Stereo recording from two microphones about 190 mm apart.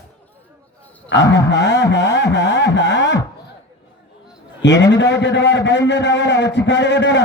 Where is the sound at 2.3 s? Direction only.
70° left (ahead or behind).